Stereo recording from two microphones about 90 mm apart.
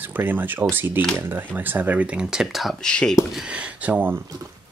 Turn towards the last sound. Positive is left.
turn(degrees=-15)  # may be behind; listen again after turning